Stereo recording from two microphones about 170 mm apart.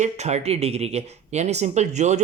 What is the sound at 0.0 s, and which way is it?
Speech, 40° right (ahead or behind).